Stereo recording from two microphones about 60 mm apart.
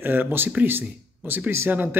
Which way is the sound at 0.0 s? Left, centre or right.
Right.